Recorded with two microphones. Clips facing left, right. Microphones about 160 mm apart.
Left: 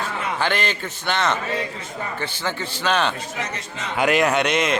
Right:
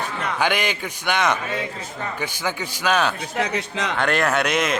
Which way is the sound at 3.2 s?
65° right (ahead or behind).